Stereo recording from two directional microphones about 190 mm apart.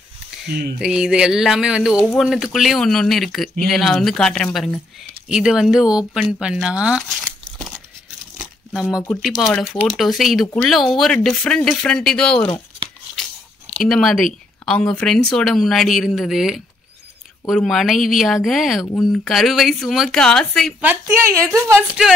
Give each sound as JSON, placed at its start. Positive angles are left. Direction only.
{"t": 0.5, "sound": "speech", "side_deg": -60}
{"t": 0.7, "sound": "speech", "side_deg": -5}
{"t": 9.1, "sound": "speech", "side_deg": 0}
{"t": 13.7, "sound": "speech", "side_deg": 0}
{"t": 20.8, "sound": "a woman's voice", "side_deg": -10}